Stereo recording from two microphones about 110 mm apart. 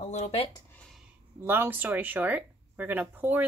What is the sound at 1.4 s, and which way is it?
Speech, 20° right (ahead or behind).